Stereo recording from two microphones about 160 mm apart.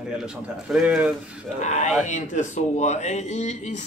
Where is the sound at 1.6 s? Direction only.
45° left (ahead or behind).